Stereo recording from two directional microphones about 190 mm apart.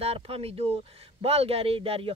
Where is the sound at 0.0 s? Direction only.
30° right (ahead or behind).